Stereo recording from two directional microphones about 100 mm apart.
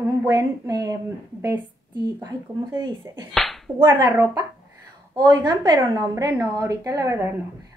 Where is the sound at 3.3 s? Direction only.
Centre (ahead or behind).